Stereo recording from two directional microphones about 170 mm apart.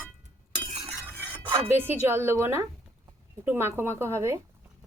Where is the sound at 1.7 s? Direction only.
15° right (ahead or behind).